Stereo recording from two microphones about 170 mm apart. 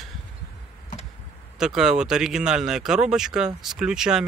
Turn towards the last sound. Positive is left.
turn(degrees=-5)  # may be behind; listen again after turning